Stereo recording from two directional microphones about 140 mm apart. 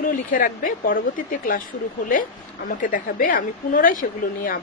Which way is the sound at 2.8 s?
75° left (ahead or behind).